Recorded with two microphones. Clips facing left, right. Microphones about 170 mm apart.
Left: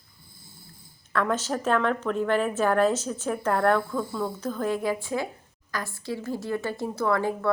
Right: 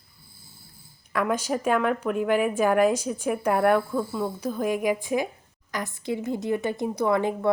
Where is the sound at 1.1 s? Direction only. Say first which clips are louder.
Right 1 dB; 10° right (ahead or behind).